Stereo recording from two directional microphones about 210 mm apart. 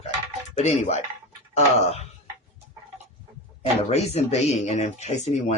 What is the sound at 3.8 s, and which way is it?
Speech, 30° left (ahead or behind).